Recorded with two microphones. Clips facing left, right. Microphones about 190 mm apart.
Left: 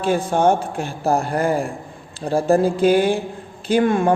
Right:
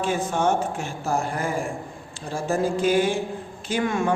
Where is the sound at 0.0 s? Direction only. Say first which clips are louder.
Left 6 dB; 35° left (ahead or behind).